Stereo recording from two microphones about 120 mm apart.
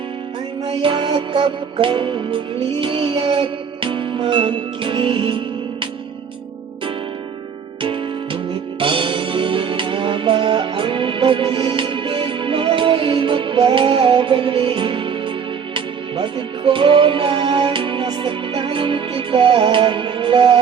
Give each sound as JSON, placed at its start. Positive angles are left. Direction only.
{"t": 0.6, "sound": "music", "side_deg": -45}
{"t": 7.8, "sound": "music", "side_deg": -45}